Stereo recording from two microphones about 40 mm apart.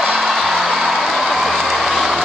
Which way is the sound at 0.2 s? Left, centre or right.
Centre.